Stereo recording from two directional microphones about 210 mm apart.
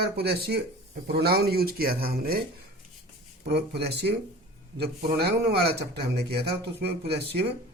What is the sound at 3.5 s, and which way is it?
Speech, 50° right (ahead or behind).